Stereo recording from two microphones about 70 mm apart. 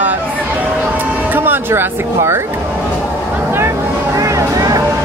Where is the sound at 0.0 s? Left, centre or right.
Right.